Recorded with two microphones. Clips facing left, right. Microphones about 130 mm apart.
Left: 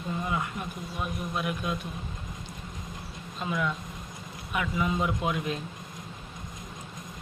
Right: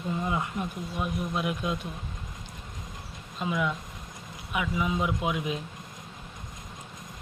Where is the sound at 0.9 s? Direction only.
15° right (ahead or behind).